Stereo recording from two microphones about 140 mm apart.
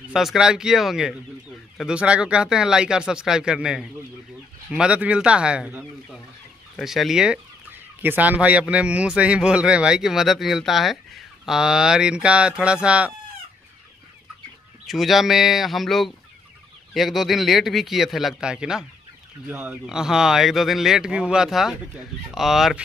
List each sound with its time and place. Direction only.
0.1 s a man's voice: centre (ahead or behind)
4.6 s chicken: 5° right (ahead or behind)
14.9 s a man's voice: centre (ahead or behind)